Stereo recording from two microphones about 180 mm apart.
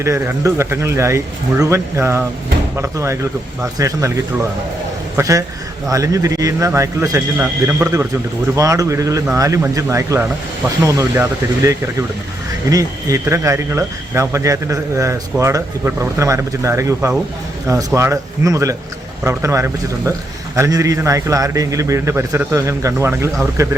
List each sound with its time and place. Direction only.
0.0 s speech: 15° right (ahead or behind)
5.1 s speech: 15° right (ahead or behind)